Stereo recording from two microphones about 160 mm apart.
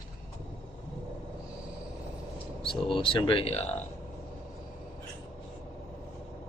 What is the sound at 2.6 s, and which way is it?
Speech, 35° left (ahead or behind).